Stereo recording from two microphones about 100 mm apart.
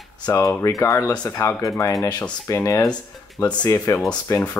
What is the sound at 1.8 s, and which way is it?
Speech, 35° left (ahead or behind).